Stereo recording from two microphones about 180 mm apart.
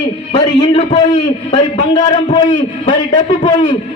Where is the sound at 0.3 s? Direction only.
25° left (ahead or behind).